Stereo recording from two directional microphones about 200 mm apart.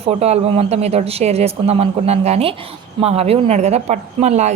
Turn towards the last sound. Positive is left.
turn(degrees=-35)  # may be behind; listen again after turning